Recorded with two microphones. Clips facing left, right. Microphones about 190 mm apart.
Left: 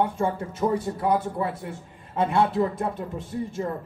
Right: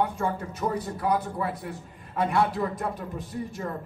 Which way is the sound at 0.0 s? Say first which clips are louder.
Left 2 dB; 25° left (ahead or behind).